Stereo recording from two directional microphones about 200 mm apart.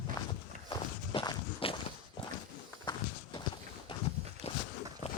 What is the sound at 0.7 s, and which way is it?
Walk, 20° left (ahead or behind).